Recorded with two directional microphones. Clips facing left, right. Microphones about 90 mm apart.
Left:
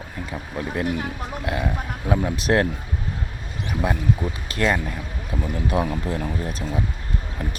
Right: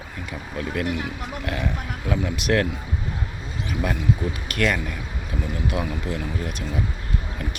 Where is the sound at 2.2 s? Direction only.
35° left (ahead or behind).